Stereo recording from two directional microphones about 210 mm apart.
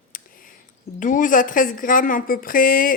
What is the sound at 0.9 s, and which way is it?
A woman's voice, 40° left (ahead or behind).